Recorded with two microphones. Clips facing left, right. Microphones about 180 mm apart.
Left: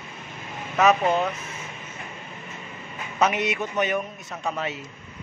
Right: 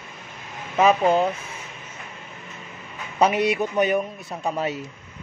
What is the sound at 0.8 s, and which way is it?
Speech, 30° right (ahead or behind).